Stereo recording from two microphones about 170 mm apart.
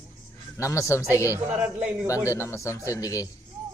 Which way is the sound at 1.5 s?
5° right (ahead or behind).